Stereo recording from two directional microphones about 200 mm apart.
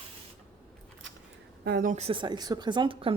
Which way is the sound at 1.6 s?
45° right (ahead or behind).